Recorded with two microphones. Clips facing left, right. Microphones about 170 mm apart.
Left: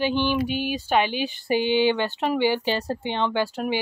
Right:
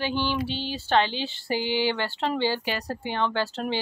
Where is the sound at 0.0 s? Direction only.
15° left (ahead or behind).